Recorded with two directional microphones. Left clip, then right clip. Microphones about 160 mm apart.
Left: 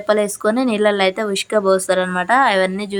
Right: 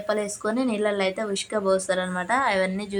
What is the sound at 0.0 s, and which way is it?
Speech, 40° left (ahead or behind).